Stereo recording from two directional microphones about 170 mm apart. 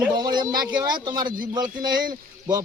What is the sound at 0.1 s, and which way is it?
A man's voice, 25° right (ahead or behind).